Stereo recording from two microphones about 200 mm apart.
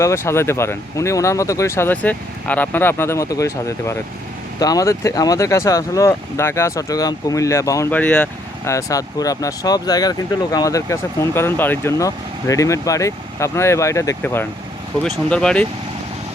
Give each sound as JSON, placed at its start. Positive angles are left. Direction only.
{"t": 0.0, "sound": "speech", "side_deg": 15}